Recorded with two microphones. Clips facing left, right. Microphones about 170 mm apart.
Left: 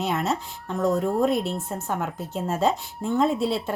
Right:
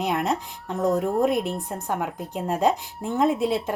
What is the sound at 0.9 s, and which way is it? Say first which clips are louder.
Speech: right 1 dB; 5° right (ahead or behind).